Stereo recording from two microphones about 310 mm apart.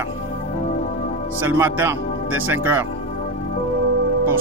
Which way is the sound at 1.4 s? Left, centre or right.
Centre.